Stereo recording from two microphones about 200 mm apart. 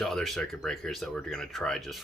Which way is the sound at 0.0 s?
Centre (ahead or behind).